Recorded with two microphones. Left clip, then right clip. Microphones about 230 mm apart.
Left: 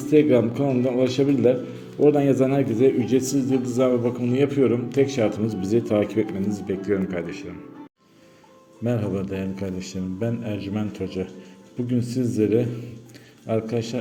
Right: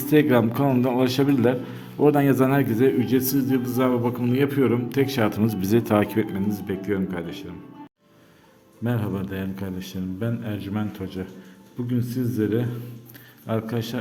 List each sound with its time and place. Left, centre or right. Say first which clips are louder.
0.0 s a man's voice: left 1 dB; right
8.8 s a man's voice: left 3 dB; centre